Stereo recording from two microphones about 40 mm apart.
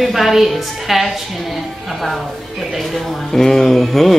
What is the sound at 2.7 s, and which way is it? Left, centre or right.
A man's voice, centre.